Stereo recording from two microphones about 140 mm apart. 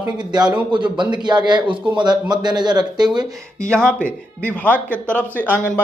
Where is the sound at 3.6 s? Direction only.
5° left (ahead or behind).